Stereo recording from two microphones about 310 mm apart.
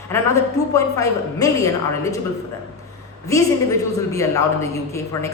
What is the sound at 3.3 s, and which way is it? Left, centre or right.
A woman's voice, centre.